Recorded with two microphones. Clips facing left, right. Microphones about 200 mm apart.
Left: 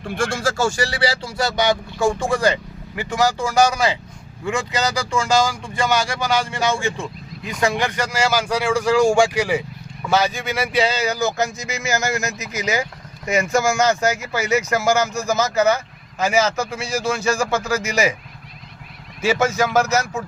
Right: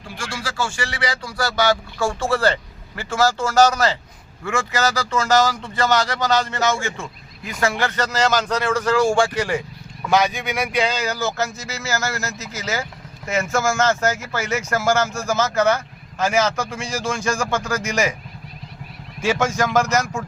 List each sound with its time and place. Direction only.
0.0 s speech: 55° left (ahead or behind); by 18.2 s 10° left (ahead or behind)
19.2 s speech: 5° left (ahead or behind)